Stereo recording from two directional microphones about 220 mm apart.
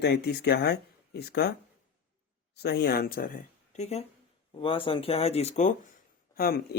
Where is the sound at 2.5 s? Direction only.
50° left (ahead or behind).